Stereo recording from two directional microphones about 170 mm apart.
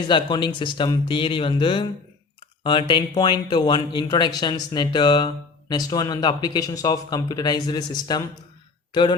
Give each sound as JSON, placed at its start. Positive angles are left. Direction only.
{"t": 0.1, "sound": "speech", "side_deg": 25}